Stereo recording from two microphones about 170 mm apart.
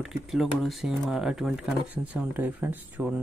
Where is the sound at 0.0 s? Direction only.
5° right (ahead or behind).